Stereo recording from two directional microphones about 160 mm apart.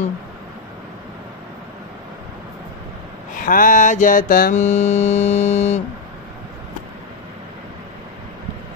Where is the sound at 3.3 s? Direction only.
60° left (ahead or behind).